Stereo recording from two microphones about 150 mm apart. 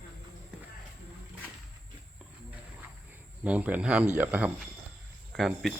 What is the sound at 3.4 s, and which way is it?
Speech, 10° right (ahead or behind).